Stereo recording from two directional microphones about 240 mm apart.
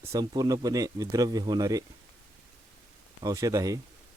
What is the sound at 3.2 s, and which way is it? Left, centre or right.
Speech, centre.